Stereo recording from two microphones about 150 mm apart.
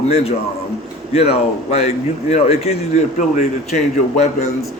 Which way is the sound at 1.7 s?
45° left (ahead or behind).